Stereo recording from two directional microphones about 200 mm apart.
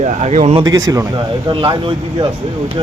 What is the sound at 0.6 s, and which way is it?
Speech, 20° right (ahead or behind).